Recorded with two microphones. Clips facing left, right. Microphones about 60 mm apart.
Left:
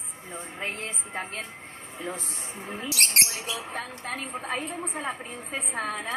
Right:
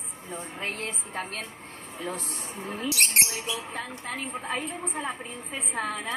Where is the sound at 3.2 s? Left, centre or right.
Left.